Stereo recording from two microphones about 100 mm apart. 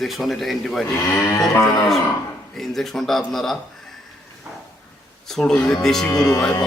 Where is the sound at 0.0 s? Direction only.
Centre (ahead or behind).